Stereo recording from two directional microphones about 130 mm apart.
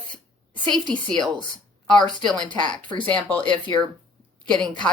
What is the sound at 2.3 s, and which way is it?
Speech, 35° right (ahead or behind).